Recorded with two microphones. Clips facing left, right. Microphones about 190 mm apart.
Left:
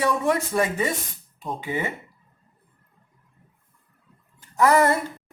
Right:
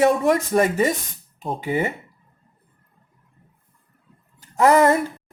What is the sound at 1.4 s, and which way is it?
Speech, 30° right (ahead or behind).